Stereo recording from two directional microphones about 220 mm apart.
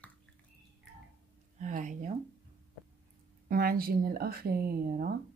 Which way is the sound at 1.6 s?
35° right (ahead or behind).